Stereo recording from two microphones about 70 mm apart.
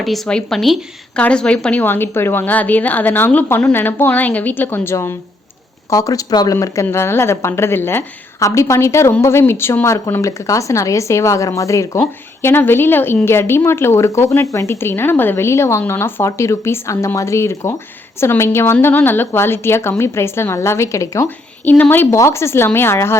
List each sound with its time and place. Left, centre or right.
0.3 s speech: centre
1.1 s a woman's voice: centre
1.8 s a woman's voice: left
5.9 s speech: left
6.5 s speech: left
6.9 s a woman's voice: left
8.4 s a woman's voice: left
21.2 s a woman's voice: left
22.2 s a woman's voice: left